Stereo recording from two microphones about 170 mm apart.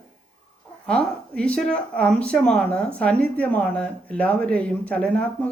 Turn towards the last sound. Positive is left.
turn(degrees=10)  # may be behind; listen again after turning